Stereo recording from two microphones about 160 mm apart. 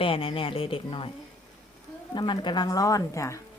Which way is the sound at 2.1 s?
30° left (ahead or behind).